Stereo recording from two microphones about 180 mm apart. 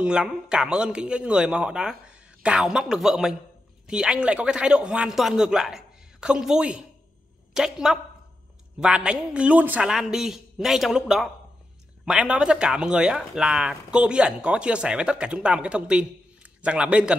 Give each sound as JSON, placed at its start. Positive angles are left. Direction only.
{"t": 0.0, "sound": "a man's voice", "side_deg": -5}